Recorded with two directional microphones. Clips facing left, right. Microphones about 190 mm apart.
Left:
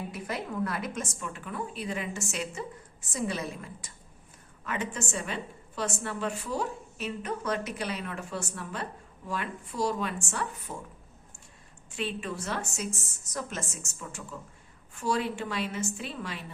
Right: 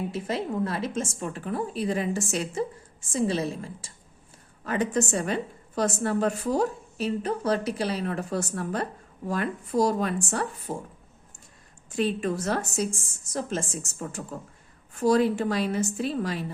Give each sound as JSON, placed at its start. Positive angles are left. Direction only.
{"t": 0.1, "sound": "a woman's voice", "side_deg": -25}
{"t": 11.9, "sound": "a woman's voice", "side_deg": -40}
{"t": 14.1, "sound": "a woman's voice", "side_deg": -45}